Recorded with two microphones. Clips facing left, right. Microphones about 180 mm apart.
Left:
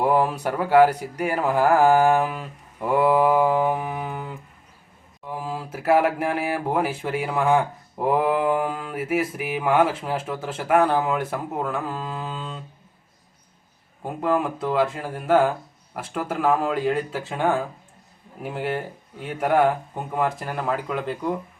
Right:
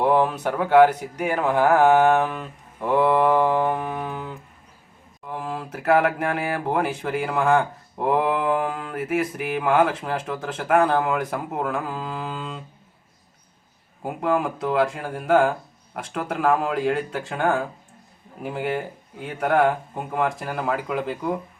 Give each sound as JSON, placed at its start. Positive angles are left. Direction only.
{"t": 0.0, "sound": "speech", "side_deg": 5}
{"t": 14.0, "sound": "speech", "side_deg": 0}